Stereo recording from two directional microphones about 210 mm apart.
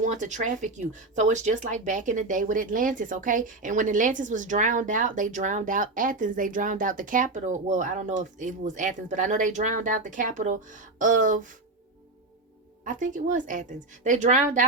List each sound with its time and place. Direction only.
0.0 s speech: 35° right (ahead or behind)
12.8 s speech: 40° right (ahead or behind)